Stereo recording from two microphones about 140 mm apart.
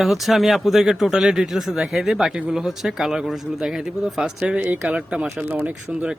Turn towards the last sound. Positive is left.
turn(degrees=-10)  # may be behind; listen again after turning